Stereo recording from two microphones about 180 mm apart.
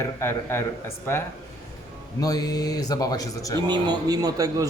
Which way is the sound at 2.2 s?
20° left (ahead or behind).